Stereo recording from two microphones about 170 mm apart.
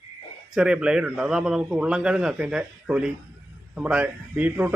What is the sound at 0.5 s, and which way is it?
A man's voice, 5° right (ahead or behind).